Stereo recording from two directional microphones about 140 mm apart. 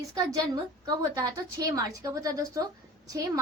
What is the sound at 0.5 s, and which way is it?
A woman's voice, 25° right (ahead or behind).